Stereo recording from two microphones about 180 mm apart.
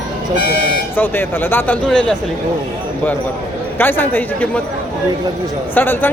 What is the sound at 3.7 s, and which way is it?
Speech, 10° left (ahead or behind).